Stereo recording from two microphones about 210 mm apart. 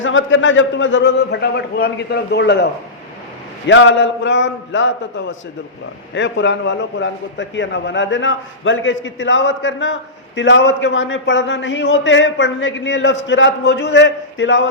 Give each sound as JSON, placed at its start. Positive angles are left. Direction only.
{"t": 0.0, "sound": "a man's voice", "side_deg": 65}
{"t": 3.7, "sound": "a man's voice", "side_deg": 60}